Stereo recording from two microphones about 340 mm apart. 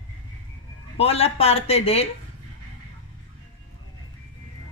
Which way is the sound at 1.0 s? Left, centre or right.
Centre.